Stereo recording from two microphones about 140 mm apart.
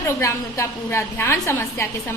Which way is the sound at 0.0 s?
20° left (ahead or behind).